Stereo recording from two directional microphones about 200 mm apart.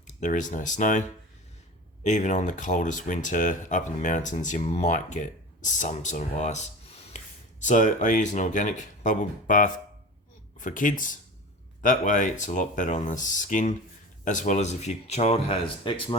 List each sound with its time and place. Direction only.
0.1 s speech: 40° left (ahead or behind)
2.0 s speech: 35° left (ahead or behind)